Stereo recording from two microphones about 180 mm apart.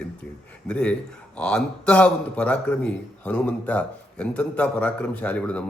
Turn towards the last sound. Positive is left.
turn(degrees=5)  # may be behind; listen again after turning